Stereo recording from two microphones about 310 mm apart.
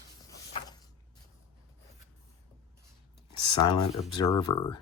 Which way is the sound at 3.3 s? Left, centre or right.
Centre.